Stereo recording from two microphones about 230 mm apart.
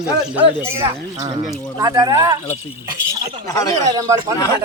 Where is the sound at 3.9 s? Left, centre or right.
Centre.